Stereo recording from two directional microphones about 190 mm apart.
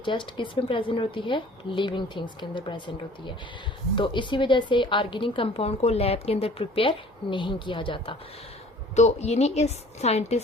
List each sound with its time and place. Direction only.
0.0 s a woman's voice: 25° left (ahead or behind)